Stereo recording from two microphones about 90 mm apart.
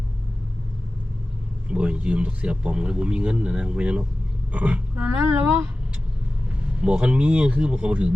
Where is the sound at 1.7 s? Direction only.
15° right (ahead or behind).